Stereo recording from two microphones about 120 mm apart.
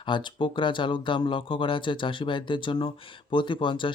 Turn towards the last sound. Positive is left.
turn(degrees=45)  # may be behind; listen again after turning